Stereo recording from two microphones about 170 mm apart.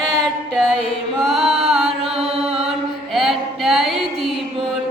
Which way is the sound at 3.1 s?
Centre (ahead or behind).